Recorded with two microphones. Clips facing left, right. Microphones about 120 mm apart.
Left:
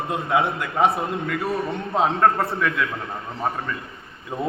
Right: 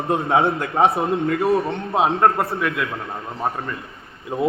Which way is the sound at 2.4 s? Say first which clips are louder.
Right 1 dB; centre (ahead or behind).